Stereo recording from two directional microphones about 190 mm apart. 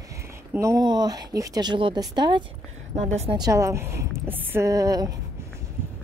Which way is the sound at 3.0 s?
35° right (ahead or behind).